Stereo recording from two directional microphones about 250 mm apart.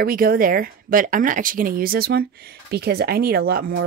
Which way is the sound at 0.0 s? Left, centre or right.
Right.